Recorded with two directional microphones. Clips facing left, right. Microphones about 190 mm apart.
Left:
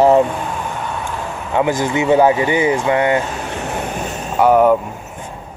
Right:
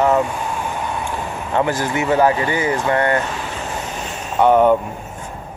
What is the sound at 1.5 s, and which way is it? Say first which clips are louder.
Speech: left 3 dB; 15° left (ahead or behind).